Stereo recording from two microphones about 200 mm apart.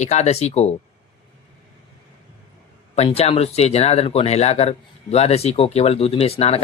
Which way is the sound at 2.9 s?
30° left (ahead or behind).